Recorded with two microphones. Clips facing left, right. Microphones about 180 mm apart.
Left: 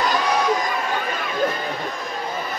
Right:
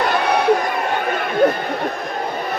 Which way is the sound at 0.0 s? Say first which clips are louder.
Right 3 dB; 60° right (ahead or behind).